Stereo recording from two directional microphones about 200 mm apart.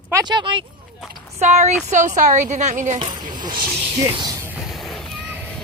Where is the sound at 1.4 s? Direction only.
35° right (ahead or behind).